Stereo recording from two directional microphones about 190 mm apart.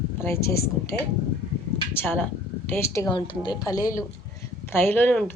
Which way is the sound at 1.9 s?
10° left (ahead or behind).